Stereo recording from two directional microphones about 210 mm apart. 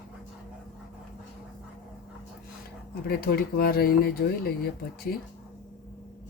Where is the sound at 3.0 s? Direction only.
45° left (ahead or behind).